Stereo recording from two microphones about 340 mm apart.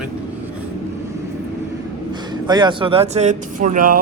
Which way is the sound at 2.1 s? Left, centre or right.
Centre.